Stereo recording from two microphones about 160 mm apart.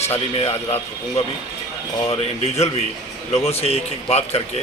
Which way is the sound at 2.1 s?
40° left (ahead or behind).